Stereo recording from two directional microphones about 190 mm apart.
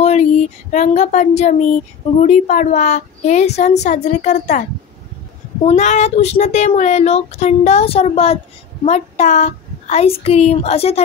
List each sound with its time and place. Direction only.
0.0 s a child's voice: 35° left (ahead or behind)
5.7 s a child's voice: 40° left (ahead or behind)